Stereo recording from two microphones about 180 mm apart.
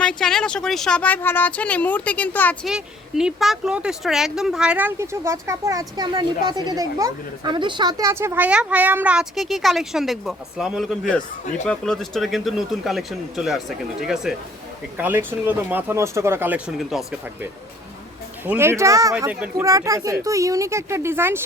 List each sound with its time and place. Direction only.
0.0 s speech: 5° left (ahead or behind)
2.6 s speech: 5° right (ahead or behind)
18.4 s speech: 15° right (ahead or behind)